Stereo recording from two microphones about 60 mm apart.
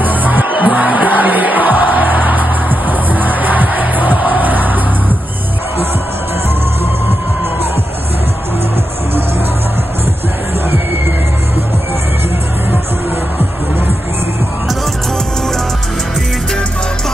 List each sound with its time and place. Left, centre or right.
0.0 s music: right